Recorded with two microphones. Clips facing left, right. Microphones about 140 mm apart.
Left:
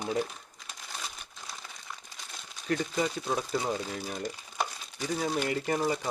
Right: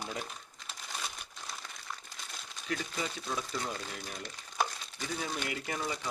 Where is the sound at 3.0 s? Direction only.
50° left (ahead or behind).